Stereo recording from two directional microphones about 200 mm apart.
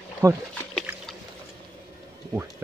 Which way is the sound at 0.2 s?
15° right (ahead or behind).